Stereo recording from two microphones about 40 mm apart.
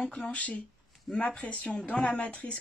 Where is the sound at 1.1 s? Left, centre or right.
Left.